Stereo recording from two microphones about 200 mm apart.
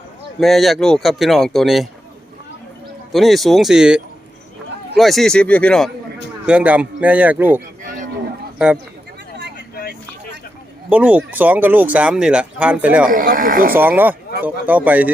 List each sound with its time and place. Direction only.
0.3 s speech: centre (ahead or behind)
3.1 s speech: centre (ahead or behind)
10.8 s speech: 5° right (ahead or behind)
13.1 s speech: 45° right (ahead or behind)
13.7 s speech: 10° right (ahead or behind)